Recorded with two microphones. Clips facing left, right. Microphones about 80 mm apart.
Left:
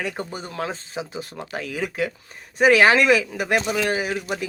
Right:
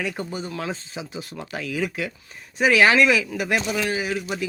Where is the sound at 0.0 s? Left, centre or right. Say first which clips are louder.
Right 1 dB; left.